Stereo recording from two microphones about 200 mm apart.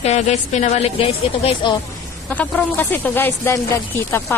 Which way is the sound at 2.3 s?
10° left (ahead or behind).